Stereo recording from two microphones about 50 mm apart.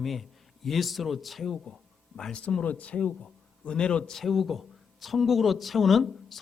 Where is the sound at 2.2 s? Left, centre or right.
Centre.